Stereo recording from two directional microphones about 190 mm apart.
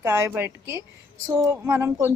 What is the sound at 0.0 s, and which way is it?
A woman's voice, 15° right (ahead or behind).